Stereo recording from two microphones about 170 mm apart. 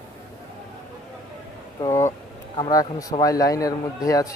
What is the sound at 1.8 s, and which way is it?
Vehicle, 15° left (ahead or behind).